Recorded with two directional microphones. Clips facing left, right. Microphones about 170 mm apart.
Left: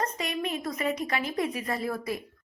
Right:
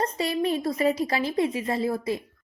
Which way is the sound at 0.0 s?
30° right (ahead or behind).